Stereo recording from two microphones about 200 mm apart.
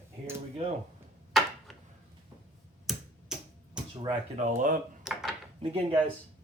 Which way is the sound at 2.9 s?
Centre (ahead or behind).